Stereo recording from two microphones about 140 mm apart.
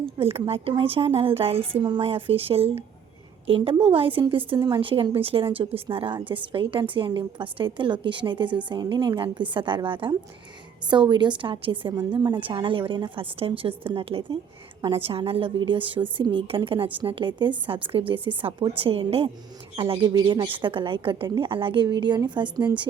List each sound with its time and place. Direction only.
0.0 s a woman's voice: 45° right (ahead or behind)